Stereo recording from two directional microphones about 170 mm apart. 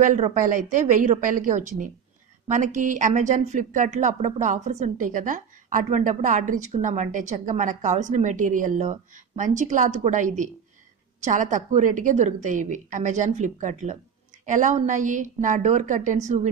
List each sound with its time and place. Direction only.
0.0 s a woman's voice: 45° right (ahead or behind)